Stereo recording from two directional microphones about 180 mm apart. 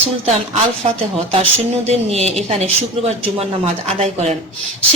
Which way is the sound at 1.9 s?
35° right (ahead or behind).